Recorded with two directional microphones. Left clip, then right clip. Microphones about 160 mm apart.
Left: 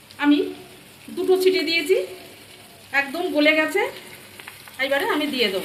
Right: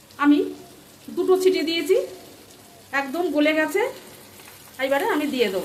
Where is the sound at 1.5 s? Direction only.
25° right (ahead or behind).